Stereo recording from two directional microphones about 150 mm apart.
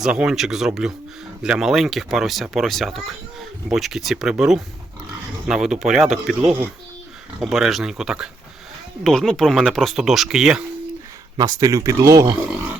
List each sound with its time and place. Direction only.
0.0 s speech: 5° right (ahead or behind)
11.3 s speech: 25° right (ahead or behind)